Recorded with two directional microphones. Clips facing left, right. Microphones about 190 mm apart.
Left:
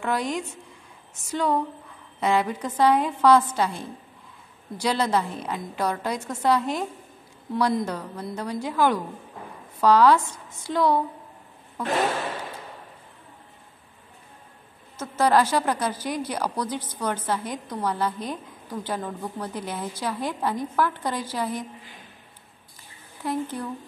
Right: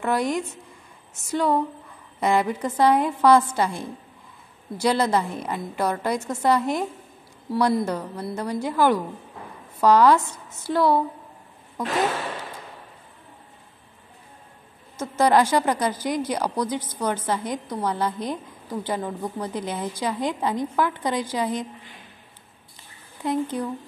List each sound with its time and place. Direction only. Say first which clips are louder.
0.0 s a woman's voice: right 3 dB; 10° right (ahead or behind)
4.8 s a woman's voice: right 2 dB; 10° right (ahead or behind)
10.1 s a woman's voice: right 1 dB; 10° left (ahead or behind)
10.7 s a woman's voice: right 2 dB; 10° right (ahead or behind)
15.0 s a woman's voice: right 2 dB; 15° right (ahead or behind)
23.2 s a woman's voice: right 3 dB; 15° right (ahead or behind)